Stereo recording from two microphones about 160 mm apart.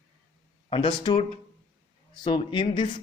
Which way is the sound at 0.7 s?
30° left (ahead or behind).